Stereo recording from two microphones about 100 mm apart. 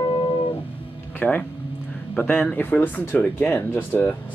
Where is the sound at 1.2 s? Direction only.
15° left (ahead or behind).